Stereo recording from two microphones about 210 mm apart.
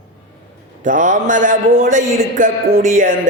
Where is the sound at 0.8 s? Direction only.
40° right (ahead or behind).